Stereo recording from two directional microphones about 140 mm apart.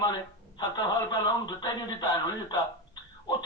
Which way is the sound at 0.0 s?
30° left (ahead or behind).